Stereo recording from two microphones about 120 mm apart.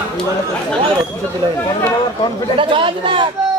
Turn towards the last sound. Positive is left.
turn(degrees=-45)  # may be behind; listen again after turning